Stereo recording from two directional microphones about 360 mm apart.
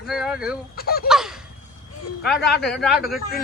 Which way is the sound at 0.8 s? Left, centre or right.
Left.